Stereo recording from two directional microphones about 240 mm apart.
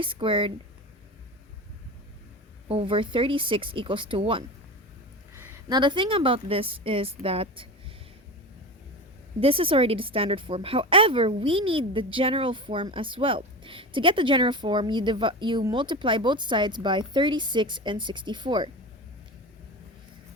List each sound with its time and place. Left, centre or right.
0.0 s a woman's voice: right
2.6 s a woman's voice: right
9.4 s a woman's voice: right